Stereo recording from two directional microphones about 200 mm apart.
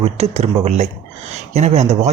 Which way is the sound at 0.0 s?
30° right (ahead or behind).